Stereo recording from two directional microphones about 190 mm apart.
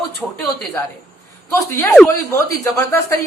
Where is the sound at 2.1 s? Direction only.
15° left (ahead or behind).